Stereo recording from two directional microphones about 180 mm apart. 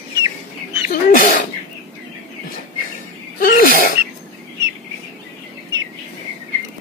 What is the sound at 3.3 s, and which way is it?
Sneeze, 50° left (ahead or behind).